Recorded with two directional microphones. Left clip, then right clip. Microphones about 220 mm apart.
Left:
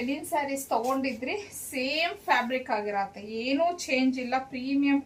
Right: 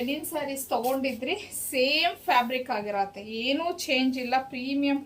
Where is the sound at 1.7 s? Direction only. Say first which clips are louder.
Right 5 dB; 15° left (ahead or behind).